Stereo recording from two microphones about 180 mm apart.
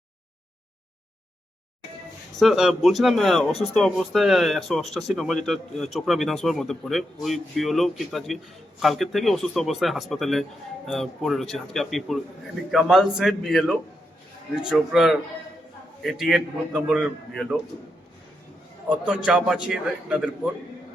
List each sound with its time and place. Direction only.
2.4 s a man's voice: centre (ahead or behind)
18.9 s a man's voice: 5° right (ahead or behind)